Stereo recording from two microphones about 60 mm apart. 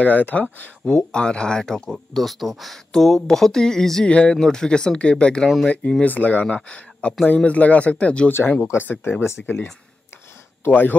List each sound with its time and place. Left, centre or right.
0.0 s speech: left
1.9 s speech: centre
6.0 s speech: left
9.2 s speech: left
10.6 s speech: left